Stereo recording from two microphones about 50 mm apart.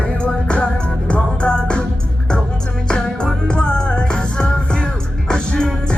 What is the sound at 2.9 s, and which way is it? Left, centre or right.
Music, centre.